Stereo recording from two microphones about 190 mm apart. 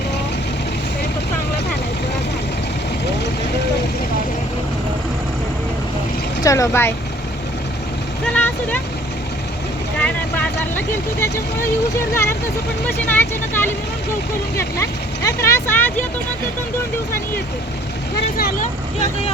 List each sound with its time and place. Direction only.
6.4 s speech: 15° left (ahead or behind)
8.3 s vehicle: 10° left (ahead or behind)
10.0 s speech: 10° left (ahead or behind)
18.3 s speech: 50° left (ahead or behind)